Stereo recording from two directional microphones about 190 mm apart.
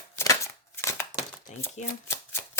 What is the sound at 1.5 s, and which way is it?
Speech, 40° left (ahead or behind).